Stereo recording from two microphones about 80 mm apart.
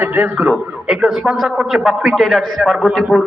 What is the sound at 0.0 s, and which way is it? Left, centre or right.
Speech, centre.